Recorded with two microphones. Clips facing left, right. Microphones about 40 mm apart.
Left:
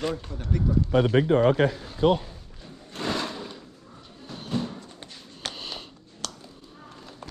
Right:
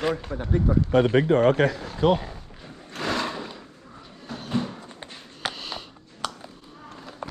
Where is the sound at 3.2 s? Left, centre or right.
Centre.